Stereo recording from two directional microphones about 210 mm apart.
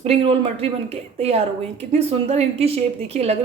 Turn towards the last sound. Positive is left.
turn(degrees=-30)  # may be behind; listen again after turning